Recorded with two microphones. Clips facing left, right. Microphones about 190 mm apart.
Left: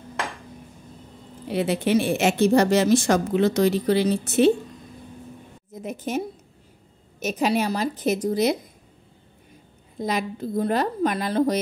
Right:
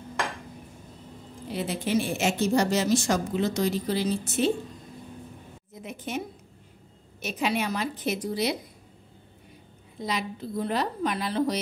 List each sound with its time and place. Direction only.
1.5 s a woman's voice: 65° left (ahead or behind)
5.7 s a woman's voice: 40° left (ahead or behind)
9.9 s a woman's voice: 50° left (ahead or behind)